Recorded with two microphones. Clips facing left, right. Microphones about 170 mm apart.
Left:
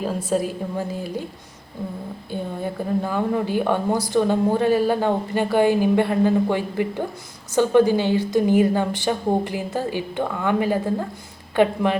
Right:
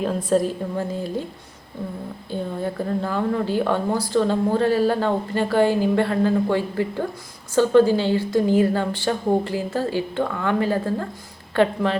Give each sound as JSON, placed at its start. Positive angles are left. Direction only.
{"t": 0.0, "sound": "a woman's voice", "side_deg": 5}
{"t": 2.3, "sound": "a woman's voice", "side_deg": 15}